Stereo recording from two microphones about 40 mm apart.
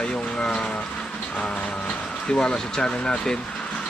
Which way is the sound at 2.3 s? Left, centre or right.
Left.